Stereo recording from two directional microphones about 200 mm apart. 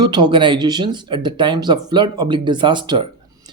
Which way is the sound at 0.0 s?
20° right (ahead or behind).